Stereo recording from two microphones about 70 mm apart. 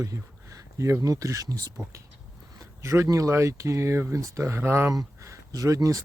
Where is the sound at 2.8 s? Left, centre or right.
Right.